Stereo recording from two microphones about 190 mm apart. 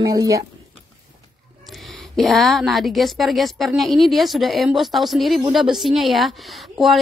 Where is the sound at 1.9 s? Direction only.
Centre (ahead or behind).